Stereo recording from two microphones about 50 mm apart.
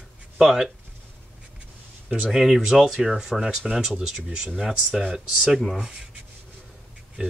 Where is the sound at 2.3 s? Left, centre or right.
Centre.